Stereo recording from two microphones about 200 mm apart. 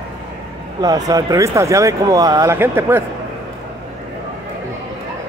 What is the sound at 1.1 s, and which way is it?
A man's voice, 15° right (ahead or behind).